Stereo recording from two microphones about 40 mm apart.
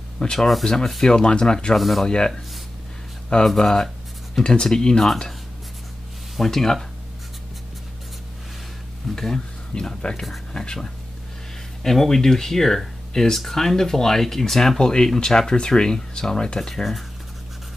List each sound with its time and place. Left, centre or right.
0.2 s speech: centre
1.8 s speech: centre
2.0 s speech: centre
3.4 s speech: centre
6.3 s speech: centre
9.1 s speech: centre